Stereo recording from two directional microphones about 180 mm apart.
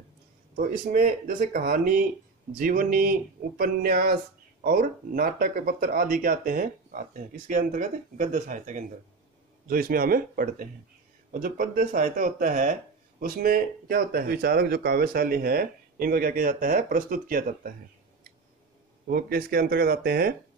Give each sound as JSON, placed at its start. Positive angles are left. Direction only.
{"t": 0.6, "sound": "speech", "side_deg": -50}
{"t": 9.7, "sound": "speech", "side_deg": -55}
{"t": 19.0, "sound": "speech", "side_deg": -55}